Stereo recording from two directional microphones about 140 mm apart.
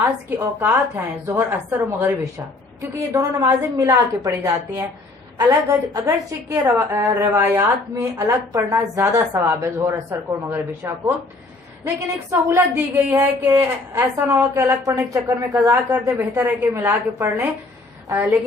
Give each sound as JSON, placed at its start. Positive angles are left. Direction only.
{"t": 0.3, "sound": "a woman's voice", "side_deg": -15}
{"t": 11.9, "sound": "a woman's voice", "side_deg": -20}